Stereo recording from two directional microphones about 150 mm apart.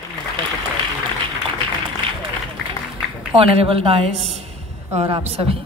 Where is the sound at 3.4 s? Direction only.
40° right (ahead or behind).